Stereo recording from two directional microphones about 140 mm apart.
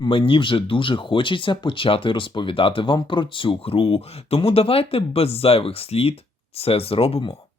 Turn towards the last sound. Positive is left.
turn(degrees=45)  # may be behind; listen again after turning